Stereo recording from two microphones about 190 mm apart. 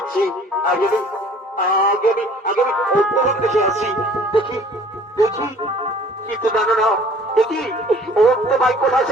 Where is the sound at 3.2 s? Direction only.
35° right (ahead or behind).